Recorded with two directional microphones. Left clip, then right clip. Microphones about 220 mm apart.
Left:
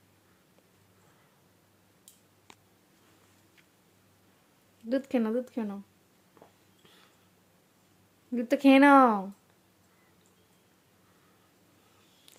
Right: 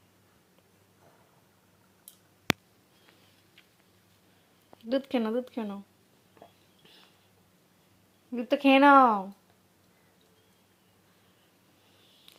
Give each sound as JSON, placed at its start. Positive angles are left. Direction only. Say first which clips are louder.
{"t": 4.9, "sound": "speech", "louder": "even", "side_deg": 15}
{"t": 8.3, "sound": "speech", "louder": "even", "side_deg": 20}